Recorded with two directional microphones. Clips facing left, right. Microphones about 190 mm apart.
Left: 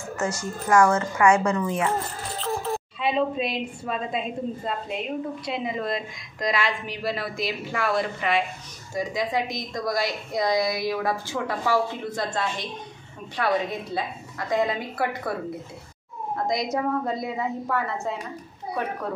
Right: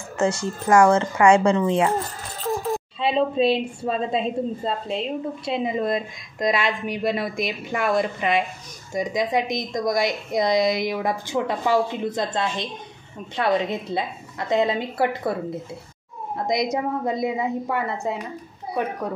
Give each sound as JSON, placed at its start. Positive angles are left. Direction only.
{"t": 0.2, "sound": "a woman's voice", "side_deg": -30}
{"t": 16.4, "sound": "a woman's voice", "side_deg": -20}